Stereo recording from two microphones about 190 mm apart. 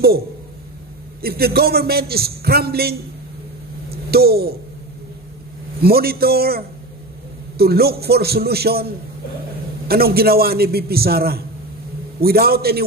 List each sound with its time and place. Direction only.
1.2 s a man's voice: 55° right (ahead or behind)
5.8 s a man's voice: 55° right (ahead or behind)